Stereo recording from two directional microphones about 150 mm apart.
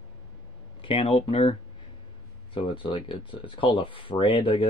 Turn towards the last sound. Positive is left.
turn(degrees=35)  # may be behind; listen again after turning